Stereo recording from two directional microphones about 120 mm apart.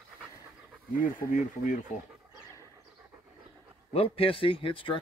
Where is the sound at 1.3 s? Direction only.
90° left.